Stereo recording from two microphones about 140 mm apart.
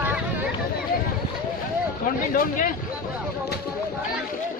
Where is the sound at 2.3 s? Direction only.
85° left.